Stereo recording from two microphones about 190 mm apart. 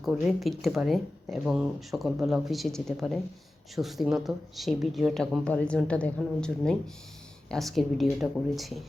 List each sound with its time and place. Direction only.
0.0 s speech: centre (ahead or behind)